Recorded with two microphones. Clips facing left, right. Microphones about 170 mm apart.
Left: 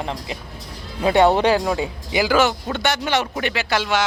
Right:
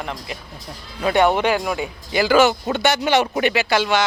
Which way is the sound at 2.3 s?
Centre (ahead or behind).